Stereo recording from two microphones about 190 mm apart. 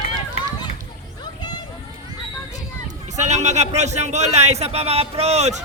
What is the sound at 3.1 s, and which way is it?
Speech, 35° right (ahead or behind).